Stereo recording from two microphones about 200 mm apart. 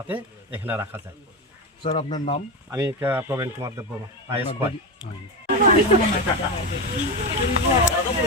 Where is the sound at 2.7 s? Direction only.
15° right (ahead or behind).